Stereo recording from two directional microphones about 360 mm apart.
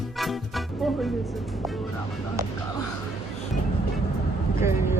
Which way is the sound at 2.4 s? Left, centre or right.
Centre.